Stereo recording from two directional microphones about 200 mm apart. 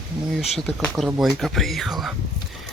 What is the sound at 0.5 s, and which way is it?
Speech, centre (ahead or behind).